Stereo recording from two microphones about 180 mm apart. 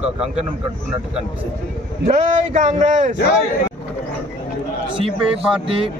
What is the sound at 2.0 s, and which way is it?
A man's voice, 40° right (ahead or behind).